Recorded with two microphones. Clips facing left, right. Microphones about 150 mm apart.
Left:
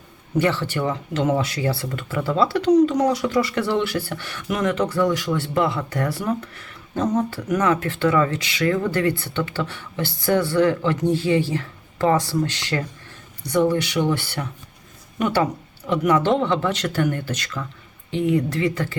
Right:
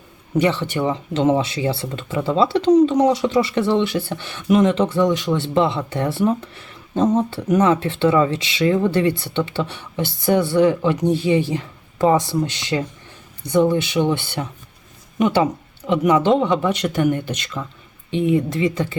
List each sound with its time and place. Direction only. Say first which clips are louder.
0.3 s speech: right 2 dB; 20° right (ahead or behind)